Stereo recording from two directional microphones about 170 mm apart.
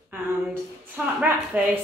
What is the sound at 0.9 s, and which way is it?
Speech, 10° right (ahead or behind).